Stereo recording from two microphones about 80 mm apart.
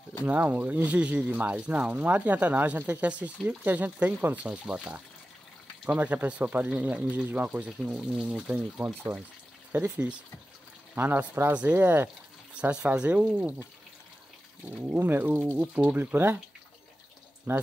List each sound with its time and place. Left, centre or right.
0.2 s speech: right
11.5 s speech: centre
12.5 s speech: centre
15.0 s speech: right
15.5 s speech: centre
16.0 s speech: right
17.5 s speech: right